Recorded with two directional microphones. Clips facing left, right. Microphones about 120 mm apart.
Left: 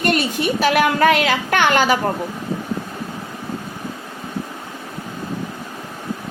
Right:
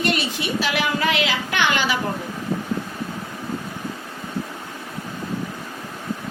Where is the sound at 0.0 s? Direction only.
50° left (ahead or behind).